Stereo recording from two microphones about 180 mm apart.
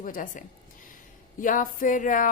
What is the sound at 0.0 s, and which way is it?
A woman's voice, 50° left (ahead or behind).